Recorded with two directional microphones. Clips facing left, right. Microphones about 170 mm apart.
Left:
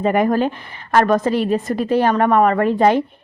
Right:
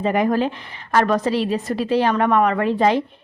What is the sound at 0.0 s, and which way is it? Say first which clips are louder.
A woman's voice: left 2 dB; 50° left (ahead or behind).